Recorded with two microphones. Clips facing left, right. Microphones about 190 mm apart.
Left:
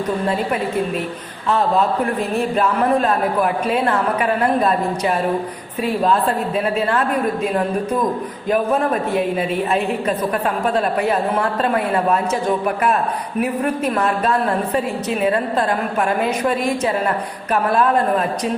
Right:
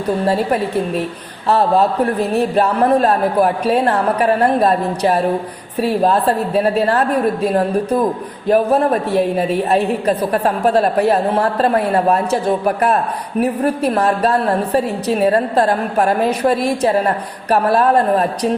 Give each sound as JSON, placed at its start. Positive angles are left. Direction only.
{"t": 1.5, "sound": "a woman's voice", "side_deg": -35}